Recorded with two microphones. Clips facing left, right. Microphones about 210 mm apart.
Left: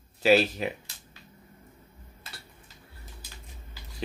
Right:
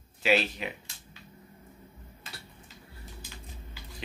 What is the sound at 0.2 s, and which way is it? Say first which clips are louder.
Speech: left 5 dB; 40° left (ahead or behind).